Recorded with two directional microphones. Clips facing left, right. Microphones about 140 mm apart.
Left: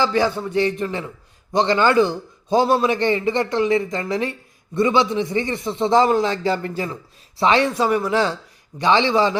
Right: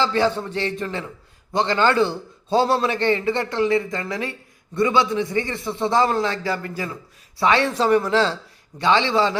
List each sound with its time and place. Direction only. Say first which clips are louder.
0.0 s a man's voice: left 1 dB; 15° left (ahead or behind)